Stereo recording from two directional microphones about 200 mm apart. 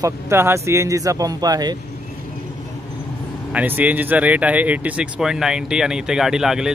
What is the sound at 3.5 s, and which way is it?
Speech, 10° right (ahead or behind).